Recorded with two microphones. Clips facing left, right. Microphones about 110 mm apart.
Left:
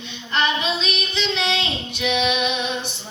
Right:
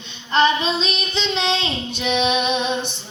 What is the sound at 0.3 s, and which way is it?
Child singing, 30° right (ahead or behind).